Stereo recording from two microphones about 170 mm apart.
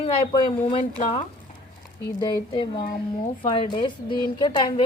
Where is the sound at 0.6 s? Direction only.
40° left (ahead or behind).